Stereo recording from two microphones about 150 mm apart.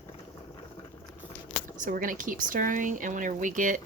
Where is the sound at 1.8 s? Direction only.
60° right (ahead or behind).